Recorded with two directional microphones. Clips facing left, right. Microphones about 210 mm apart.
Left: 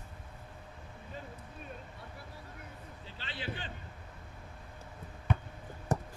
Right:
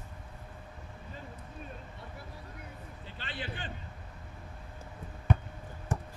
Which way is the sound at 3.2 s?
50° right (ahead or behind).